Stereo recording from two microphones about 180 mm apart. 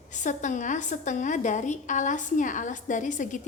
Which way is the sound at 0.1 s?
45° left (ahead or behind).